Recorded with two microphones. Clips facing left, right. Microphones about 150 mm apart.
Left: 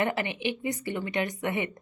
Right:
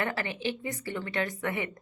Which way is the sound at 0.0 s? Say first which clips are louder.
Left 3 dB; 20° left (ahead or behind).